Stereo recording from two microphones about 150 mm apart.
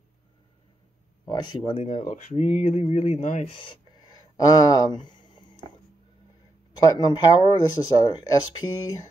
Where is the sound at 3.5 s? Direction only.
30° left (ahead or behind).